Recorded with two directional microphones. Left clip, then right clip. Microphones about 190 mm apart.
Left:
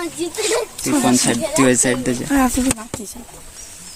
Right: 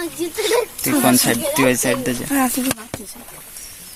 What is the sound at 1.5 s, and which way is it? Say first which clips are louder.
Speech: left 3 dB; 15° left (ahead or behind).